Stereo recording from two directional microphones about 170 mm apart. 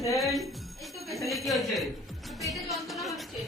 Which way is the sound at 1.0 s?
Centre (ahead or behind).